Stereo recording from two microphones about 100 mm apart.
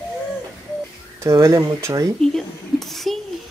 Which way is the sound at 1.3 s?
35° right (ahead or behind).